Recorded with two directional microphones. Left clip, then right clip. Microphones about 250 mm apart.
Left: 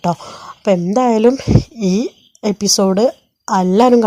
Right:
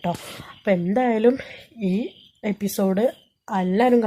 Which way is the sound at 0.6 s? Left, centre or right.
Left.